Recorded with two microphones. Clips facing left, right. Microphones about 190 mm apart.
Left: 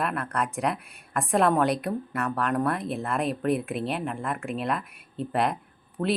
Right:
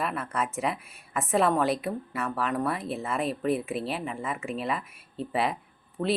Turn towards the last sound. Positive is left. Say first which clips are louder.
# left 1 dB
turn(degrees=0)  # may be behind; listen again after turning